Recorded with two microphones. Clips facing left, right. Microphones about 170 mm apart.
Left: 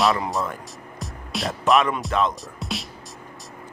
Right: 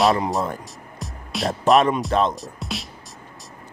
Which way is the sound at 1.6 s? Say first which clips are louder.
Right 3 dB; 35° right (ahead or behind).